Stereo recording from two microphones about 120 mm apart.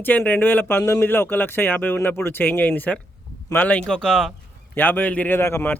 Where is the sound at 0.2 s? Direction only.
15° left (ahead or behind).